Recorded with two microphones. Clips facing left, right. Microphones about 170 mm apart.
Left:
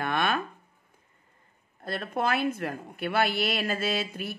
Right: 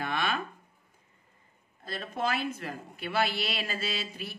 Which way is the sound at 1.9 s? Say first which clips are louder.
Left 4 dB; 55° left (ahead or behind).